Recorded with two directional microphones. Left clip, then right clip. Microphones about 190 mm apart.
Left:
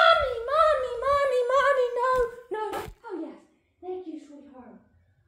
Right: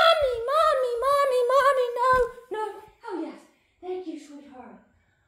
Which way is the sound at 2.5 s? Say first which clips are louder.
Right 1 dB; 45° right (ahead or behind).